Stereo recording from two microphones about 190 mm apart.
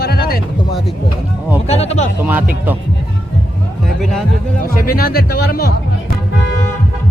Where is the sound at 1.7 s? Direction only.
35° left (ahead or behind).